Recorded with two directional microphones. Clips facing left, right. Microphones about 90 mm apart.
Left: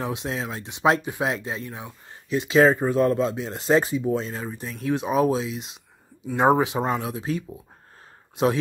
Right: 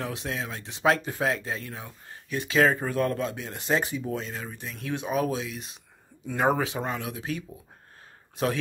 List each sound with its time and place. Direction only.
0.0 s speech: 25° left (ahead or behind)